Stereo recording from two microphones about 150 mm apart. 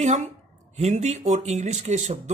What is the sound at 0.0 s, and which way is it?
Speech, 50° right (ahead or behind).